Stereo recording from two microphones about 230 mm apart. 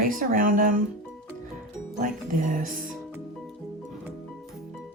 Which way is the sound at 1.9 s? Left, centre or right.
Right.